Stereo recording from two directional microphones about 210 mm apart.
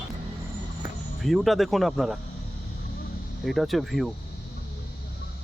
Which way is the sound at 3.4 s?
Centre (ahead or behind).